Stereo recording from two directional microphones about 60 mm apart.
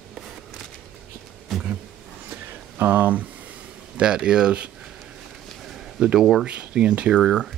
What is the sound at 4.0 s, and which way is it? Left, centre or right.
Speech, centre.